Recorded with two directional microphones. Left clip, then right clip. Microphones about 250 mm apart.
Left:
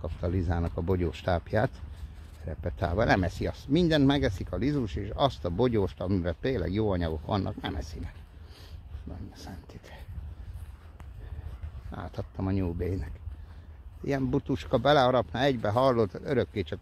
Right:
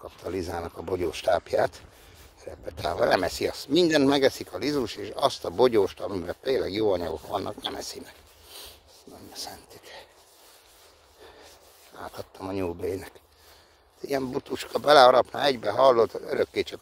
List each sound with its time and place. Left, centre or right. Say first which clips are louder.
0.3 s speech: right 6 dB; right
9.3 s a sound: right 8 dB; right
12.1 s speech: right 1 dB; right